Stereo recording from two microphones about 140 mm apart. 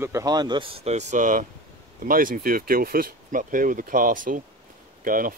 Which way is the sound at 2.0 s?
85° right.